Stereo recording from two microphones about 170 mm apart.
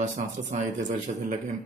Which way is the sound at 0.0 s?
45° right (ahead or behind).